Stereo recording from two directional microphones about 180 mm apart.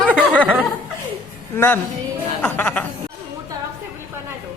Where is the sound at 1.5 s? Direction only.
10° left (ahead or behind).